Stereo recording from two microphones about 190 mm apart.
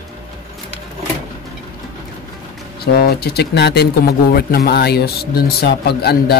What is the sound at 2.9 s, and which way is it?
Speech, 55° left (ahead or behind).